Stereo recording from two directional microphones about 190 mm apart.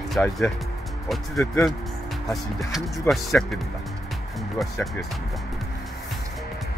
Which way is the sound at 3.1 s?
10° left (ahead or behind).